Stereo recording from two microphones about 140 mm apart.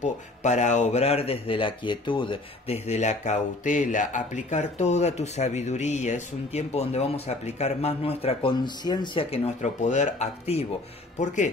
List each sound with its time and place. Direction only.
0.0 s speech: 55° left (ahead or behind); by 2.8 s 35° left (ahead or behind)
2.9 s speech: 55° left (ahead or behind)